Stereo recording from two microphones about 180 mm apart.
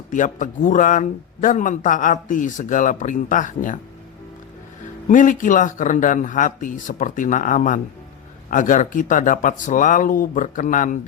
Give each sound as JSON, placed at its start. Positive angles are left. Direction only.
{"t": 0.1, "sound": "speech", "side_deg": 45}
{"t": 5.0, "sound": "speech", "side_deg": 45}